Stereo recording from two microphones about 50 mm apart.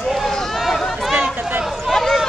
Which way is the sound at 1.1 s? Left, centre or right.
Right.